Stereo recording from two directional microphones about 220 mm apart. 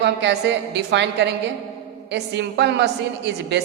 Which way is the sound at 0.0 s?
50° right (ahead or behind).